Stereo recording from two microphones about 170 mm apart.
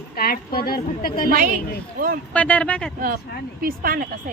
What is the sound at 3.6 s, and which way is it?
Speech, 60° right (ahead or behind).